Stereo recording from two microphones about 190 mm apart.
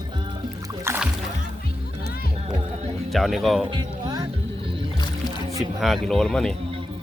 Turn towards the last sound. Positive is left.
turn(degrees=5)  # may be behind; listen again after turning